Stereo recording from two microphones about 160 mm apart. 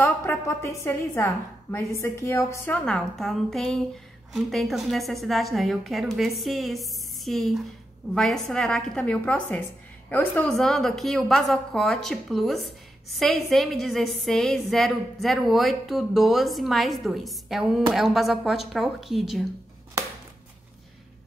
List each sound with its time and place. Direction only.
0.0 s a woman's voice: 15° left (ahead or behind)
2.8 s a woman's voice: 5° left (ahead or behind)